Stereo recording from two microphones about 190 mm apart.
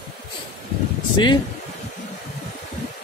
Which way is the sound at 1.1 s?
25° left (ahead or behind).